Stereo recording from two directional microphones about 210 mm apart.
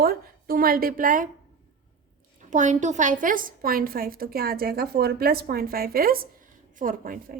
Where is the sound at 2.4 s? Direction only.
35° right (ahead or behind).